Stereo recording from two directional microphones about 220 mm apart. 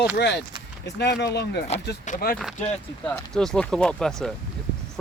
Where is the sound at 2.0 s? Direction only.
40° left (ahead or behind).